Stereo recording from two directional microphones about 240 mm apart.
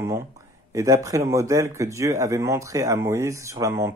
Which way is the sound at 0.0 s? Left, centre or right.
Centre.